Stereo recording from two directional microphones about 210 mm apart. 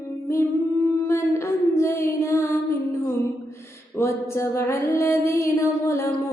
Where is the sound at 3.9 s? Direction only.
15° left (ahead or behind).